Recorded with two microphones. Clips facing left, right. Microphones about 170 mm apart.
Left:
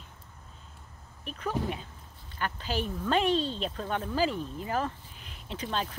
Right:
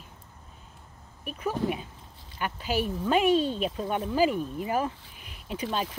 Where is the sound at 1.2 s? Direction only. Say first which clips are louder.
Right 3 dB; 10° right (ahead or behind).